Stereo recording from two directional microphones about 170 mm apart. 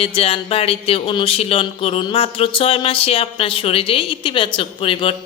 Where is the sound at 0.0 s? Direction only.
35° left (ahead or behind).